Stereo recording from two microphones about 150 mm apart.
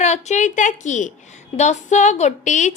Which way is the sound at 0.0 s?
50° left (ahead or behind).